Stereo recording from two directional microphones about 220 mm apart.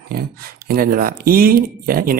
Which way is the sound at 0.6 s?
40° right (ahead or behind).